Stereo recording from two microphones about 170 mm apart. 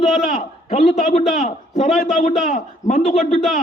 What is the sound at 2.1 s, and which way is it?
A man's voice, 40° left (ahead or behind).